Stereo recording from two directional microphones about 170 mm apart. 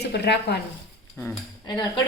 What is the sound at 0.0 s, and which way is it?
Speech, 80° left.